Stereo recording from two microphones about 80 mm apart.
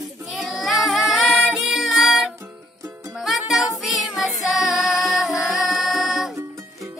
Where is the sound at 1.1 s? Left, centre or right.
Centre.